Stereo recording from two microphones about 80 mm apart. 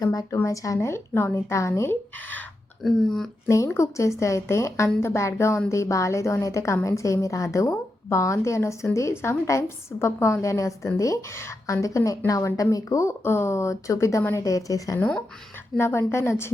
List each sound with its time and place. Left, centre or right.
0.0 s a woman's voice: left
2.8 s speech: centre
3.5 s a woman's voice: left
15.8 s a woman's voice: left